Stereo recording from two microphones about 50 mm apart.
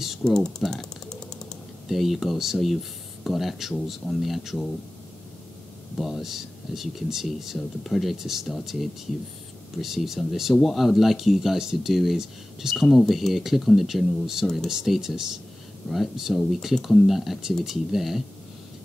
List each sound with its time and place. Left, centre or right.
0.2 s typing: centre
1.9 s speech: centre
5.9 s speech: centre
12.7 s speech: centre